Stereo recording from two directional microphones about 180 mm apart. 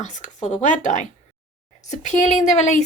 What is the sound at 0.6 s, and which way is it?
Speech, 45° left (ahead or behind).